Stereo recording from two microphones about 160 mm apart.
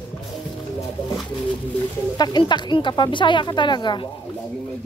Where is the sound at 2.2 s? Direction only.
25° left (ahead or behind).